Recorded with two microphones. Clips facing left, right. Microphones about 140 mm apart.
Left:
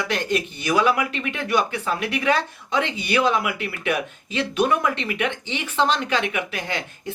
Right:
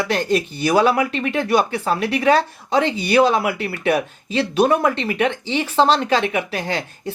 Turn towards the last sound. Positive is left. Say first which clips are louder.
# right 5 dB
turn(degrees=-35)  # may be behind; listen again after turning